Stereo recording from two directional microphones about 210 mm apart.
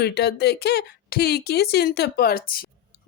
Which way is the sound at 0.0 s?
50° left (ahead or behind).